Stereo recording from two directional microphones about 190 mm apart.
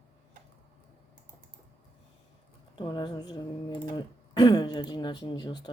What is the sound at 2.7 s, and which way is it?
Speech, 25° left (ahead or behind).